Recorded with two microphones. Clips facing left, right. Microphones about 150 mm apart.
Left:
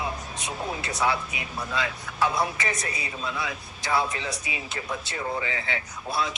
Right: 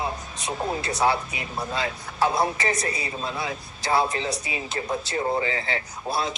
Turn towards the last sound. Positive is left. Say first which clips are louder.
# right 2 dB
turn(degrees=-35)  # may be behind; listen again after turning